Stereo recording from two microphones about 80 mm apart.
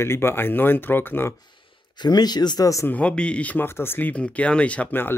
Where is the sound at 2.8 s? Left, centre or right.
Centre.